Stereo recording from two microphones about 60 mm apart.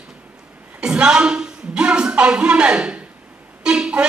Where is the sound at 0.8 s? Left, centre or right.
Centre.